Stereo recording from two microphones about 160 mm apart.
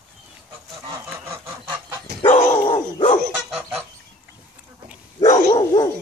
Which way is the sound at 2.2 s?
45° left (ahead or behind).